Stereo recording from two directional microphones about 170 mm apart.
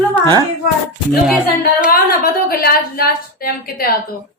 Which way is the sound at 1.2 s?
5° right (ahead or behind).